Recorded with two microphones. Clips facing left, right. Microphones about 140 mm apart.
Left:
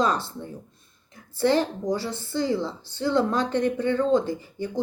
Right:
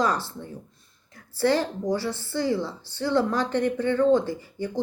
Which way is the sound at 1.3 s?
20° left (ahead or behind).